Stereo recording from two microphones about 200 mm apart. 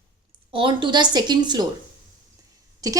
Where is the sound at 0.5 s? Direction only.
25° right (ahead or behind).